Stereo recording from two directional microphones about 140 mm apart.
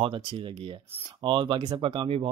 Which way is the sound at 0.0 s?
35° right (ahead or behind).